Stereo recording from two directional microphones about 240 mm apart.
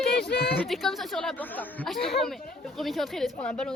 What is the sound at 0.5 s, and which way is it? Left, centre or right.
Speech, centre.